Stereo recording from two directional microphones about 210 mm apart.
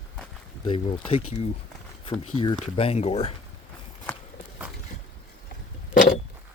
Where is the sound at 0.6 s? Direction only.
25° left (ahead or behind).